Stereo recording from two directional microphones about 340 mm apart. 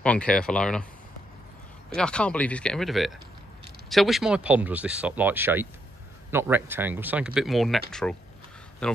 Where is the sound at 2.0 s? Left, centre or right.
Centre.